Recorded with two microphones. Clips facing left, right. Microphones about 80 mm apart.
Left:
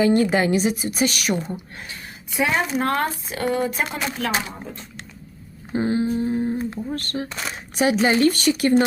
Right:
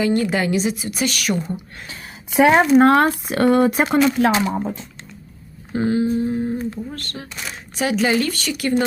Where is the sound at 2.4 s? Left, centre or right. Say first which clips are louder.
Right 9 dB; right.